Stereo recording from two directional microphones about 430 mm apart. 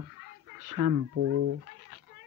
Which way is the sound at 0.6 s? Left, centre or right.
Right.